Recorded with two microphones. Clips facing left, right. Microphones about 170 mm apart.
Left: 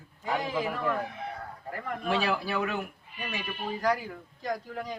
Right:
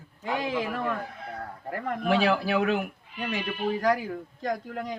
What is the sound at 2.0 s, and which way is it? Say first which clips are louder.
Speech: right 5 dB; 80° right.